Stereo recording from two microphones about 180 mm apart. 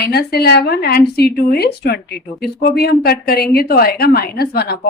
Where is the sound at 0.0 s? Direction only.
60° left (ahead or behind).